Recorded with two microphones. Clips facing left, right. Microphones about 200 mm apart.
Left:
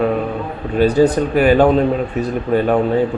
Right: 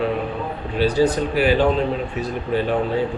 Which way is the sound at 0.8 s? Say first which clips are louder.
Left 5 dB; 50° left (ahead or behind).